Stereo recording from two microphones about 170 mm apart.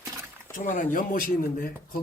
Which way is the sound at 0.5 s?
50° left (ahead or behind).